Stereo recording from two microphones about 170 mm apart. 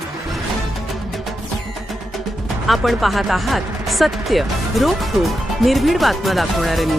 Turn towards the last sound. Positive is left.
turn(degrees=0)  # may be behind; listen again after turning